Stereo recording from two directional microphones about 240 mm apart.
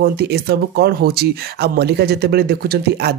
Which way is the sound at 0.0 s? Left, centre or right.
Right.